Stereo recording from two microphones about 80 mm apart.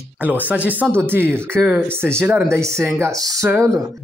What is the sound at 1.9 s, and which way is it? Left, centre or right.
Speech, right.